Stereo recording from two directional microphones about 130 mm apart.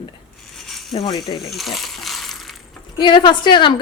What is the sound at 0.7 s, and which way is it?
Rattle, centre (ahead or behind).